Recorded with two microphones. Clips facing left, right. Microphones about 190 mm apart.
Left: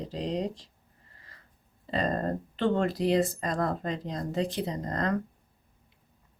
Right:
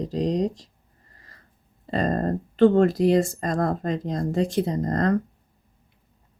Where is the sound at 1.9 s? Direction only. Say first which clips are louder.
Right 5 dB; 45° right (ahead or behind).